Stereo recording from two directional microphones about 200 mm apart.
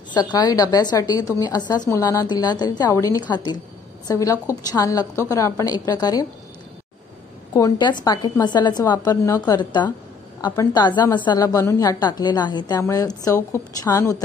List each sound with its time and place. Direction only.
0.1 s a woman's voice: 20° left (ahead or behind)
7.5 s a woman's voice: 15° left (ahead or behind)